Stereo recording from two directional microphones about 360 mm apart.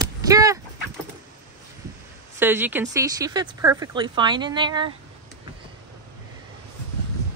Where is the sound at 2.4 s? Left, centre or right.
Centre.